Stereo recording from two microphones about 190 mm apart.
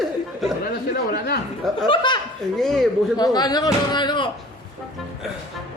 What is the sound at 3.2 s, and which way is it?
Speech, 20° left (ahead or behind).